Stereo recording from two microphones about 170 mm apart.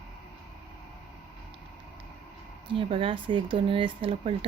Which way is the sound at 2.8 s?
30° right (ahead or behind).